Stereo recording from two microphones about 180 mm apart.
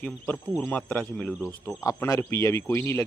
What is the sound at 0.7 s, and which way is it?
Speech, 5° left (ahead or behind).